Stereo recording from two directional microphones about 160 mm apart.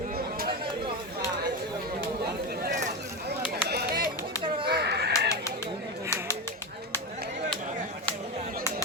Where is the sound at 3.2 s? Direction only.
90° right.